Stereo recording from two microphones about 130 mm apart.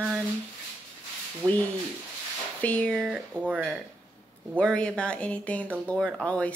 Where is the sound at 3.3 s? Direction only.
15° right (ahead or behind).